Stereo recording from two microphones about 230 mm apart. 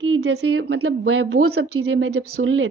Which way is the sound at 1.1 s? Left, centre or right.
Right.